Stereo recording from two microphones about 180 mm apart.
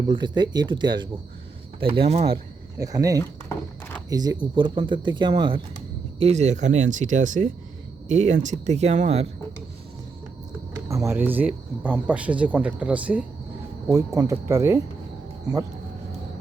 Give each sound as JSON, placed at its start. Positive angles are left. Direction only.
{"t": 0.1, "sound": "speech", "side_deg": -25}
{"t": 2.7, "sound": "speech", "side_deg": -20}
{"t": 6.1, "sound": "speech", "side_deg": -35}
{"t": 10.8, "sound": "speech", "side_deg": -15}
{"t": 13.8, "sound": "speech", "side_deg": -20}